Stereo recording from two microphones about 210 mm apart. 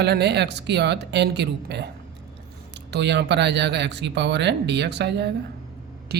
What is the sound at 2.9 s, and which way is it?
Speech, 55° right (ahead or behind).